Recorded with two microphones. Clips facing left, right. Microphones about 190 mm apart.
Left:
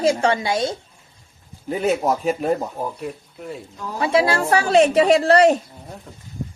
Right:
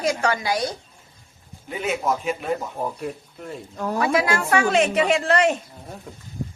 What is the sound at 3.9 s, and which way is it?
A woman's voice, 30° left (ahead or behind).